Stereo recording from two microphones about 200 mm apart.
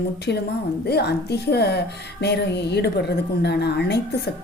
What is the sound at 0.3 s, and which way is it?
A woman's voice, 60° left (ahead or behind).